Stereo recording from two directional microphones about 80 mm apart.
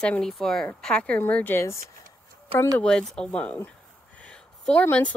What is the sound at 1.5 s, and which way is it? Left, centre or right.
Speech, left.